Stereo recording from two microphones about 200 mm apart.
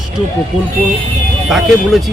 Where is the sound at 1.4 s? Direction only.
Centre (ahead or behind).